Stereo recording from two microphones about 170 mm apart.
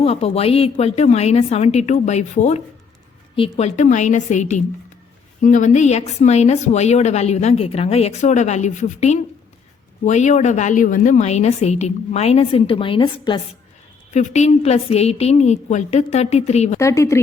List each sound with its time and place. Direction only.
0.0 s a woman's voice: 40° left (ahead or behind)
14.1 s a woman's voice: 45° left (ahead or behind)
16.7 s speech: 15° left (ahead or behind)